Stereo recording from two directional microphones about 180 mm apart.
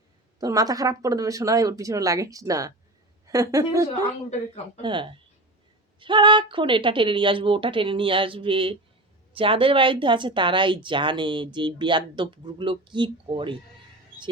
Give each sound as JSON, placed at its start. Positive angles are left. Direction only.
{"t": 0.3, "sound": "a woman's voice", "side_deg": -20}